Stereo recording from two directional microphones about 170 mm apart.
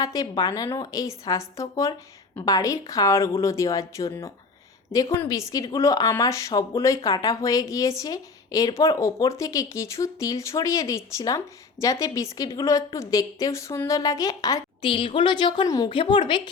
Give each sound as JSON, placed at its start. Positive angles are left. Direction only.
{"t": 0.0, "sound": "speech", "side_deg": 20}